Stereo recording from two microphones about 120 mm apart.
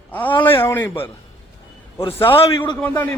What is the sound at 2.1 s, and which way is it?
Speech, 20° left (ahead or behind).